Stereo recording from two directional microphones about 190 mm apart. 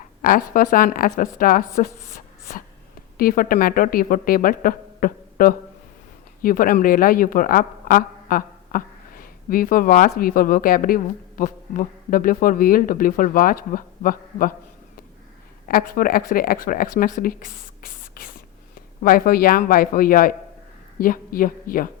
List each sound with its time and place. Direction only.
0.2 s a woman's voice: 50° left (ahead or behind)
3.2 s a woman's voice: 50° left (ahead or behind)
15.6 s a woman's voice: 50° left (ahead or behind)
17.2 s whispering: 45° left (ahead or behind)
19.0 s a woman's voice: 50° left (ahead or behind)